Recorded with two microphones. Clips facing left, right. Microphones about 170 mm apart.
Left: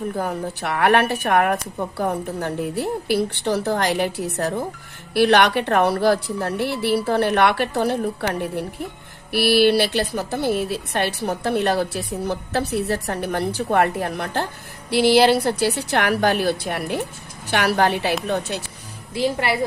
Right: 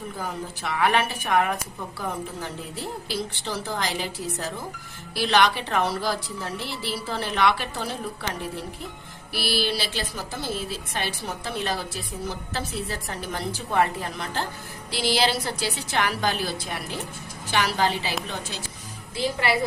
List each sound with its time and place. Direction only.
0.2 s a woman's voice: 60° left (ahead or behind)